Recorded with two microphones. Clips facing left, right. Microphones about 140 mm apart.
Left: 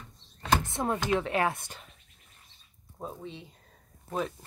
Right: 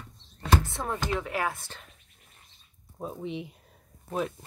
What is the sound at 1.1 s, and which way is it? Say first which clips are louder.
Speech: left 4 dB; 25° left (ahead or behind).